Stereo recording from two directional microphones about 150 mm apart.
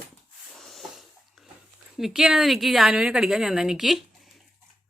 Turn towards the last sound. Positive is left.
turn(degrees=0)  # may be behind; listen again after turning